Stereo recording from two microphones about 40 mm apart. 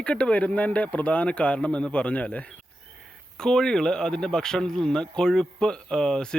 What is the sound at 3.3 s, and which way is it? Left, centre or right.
A man's voice, centre.